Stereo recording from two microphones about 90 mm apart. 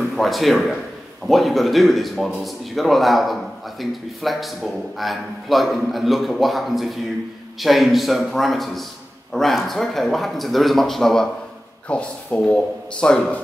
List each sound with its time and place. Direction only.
0.1 s a man's voice: centre (ahead or behind)